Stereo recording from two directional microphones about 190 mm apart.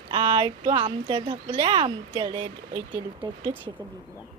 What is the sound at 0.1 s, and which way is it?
Speech, 25° right (ahead or behind).